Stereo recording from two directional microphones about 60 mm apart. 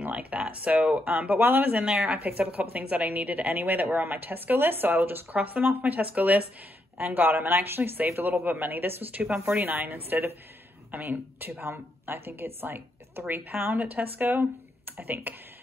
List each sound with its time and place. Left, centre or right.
0.0 s a woman's voice: right